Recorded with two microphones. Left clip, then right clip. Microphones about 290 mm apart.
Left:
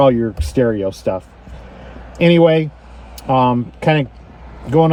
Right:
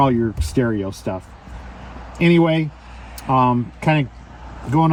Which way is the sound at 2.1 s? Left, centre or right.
Centre.